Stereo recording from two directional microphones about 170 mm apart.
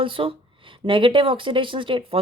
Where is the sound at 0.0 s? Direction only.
30° right (ahead or behind).